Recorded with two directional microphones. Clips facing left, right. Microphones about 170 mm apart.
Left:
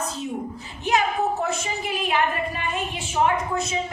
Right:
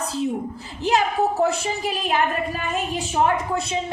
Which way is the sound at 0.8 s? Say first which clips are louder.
Right 2 dB; 35° right (ahead or behind).